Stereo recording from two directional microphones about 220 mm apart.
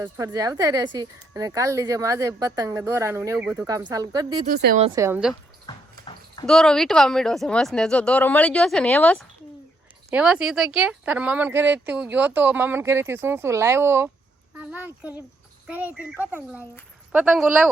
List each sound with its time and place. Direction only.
0.0 s speech: 15° right (ahead or behind)
4.4 s speech: 40° right (ahead or behind)
4.8 s speech: 15° right (ahead or behind)
5.6 s a sound: 20° left (ahead or behind)
6.4 s a woman's voice: centre (ahead or behind)
10.1 s speech: 5° right (ahead or behind)